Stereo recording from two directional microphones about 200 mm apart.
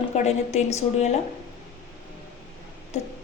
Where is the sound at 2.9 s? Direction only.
35° left (ahead or behind).